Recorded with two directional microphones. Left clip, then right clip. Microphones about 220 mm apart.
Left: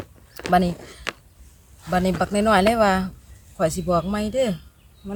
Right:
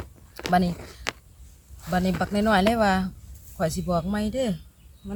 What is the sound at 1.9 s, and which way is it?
Speech, 15° left (ahead or behind).